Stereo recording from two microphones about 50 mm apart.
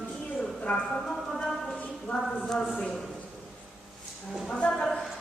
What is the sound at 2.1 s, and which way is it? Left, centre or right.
Speech, left.